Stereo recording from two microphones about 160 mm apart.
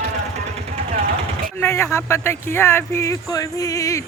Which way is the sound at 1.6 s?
15° left (ahead or behind).